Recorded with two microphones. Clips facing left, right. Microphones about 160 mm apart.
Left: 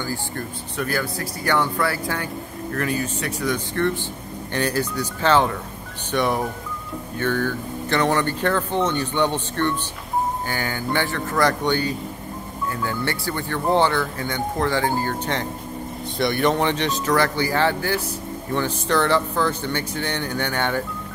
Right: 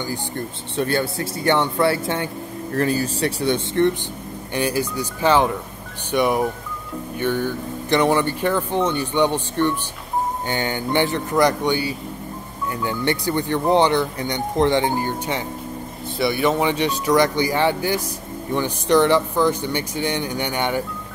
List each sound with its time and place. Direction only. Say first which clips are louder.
0.0 s speech: right 1 dB; 15° right (ahead or behind)
0.7 s speech: right 4 dB; 30° right (ahead or behind)
4.6 s speech: right 1 dB; 10° right (ahead or behind)